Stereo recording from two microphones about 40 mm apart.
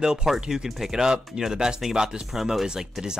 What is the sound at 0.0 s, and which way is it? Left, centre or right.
Speech, centre.